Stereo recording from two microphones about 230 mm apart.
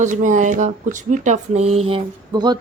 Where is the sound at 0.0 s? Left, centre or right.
Right.